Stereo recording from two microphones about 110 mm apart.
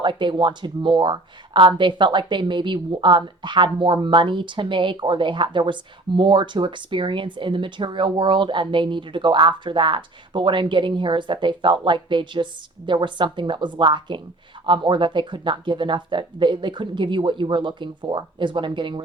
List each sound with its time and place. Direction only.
0.0 s speech: 45° right (ahead or behind)